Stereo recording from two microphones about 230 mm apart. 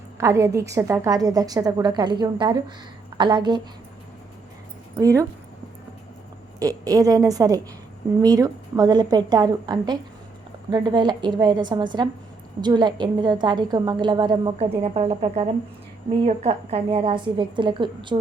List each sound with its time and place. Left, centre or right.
0.2 s a woman's voice: centre
4.9 s a woman's voice: centre
6.6 s a woman's voice: centre